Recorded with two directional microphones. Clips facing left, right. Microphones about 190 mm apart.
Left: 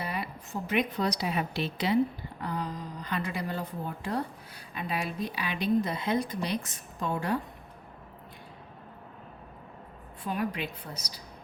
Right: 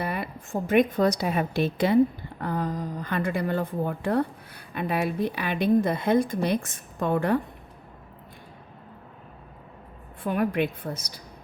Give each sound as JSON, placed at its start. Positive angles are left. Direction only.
{"t": 0.0, "sound": "a woman's voice", "side_deg": -55}
{"t": 10.2, "sound": "a woman's voice", "side_deg": -55}